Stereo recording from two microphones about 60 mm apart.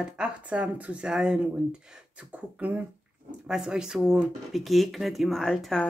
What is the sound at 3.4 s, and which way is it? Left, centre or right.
Speech, centre.